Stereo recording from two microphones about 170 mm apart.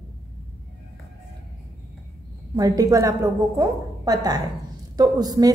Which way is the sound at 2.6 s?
20° right (ahead or behind).